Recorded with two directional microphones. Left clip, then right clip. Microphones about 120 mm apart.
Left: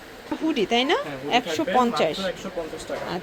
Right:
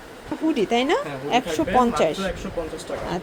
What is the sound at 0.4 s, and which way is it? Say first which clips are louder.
A woman's voice: right 1 dB; 15° right (ahead or behind).